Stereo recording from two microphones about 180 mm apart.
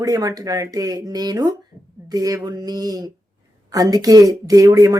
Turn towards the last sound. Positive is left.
turn(degrees=-20)  # may be behind; listen again after turning